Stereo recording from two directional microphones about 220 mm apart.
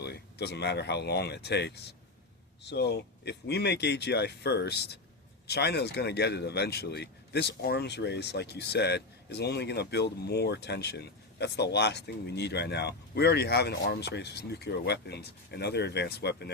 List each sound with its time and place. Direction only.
0.0 s speech: 45° left (ahead or behind)